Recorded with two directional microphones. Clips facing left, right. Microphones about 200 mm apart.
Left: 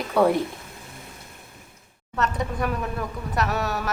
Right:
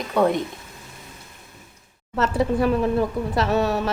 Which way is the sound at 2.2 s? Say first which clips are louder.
Right 6 dB; 30° right (ahead or behind).